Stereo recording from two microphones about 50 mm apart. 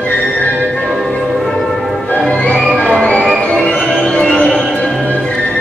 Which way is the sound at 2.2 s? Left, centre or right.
Centre.